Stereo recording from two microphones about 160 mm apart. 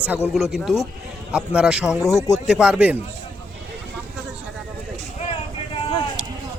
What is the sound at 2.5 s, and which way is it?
Speech, 5° right (ahead or behind).